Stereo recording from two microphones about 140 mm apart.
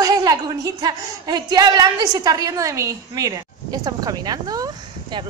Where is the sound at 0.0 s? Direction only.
25° right (ahead or behind).